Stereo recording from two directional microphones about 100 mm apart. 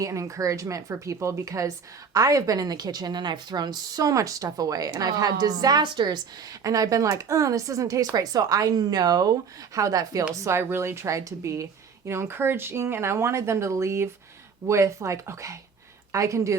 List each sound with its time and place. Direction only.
0.0 s a woman's voice: 35° right (ahead or behind)
10.4 s a woman's voice: 25° right (ahead or behind)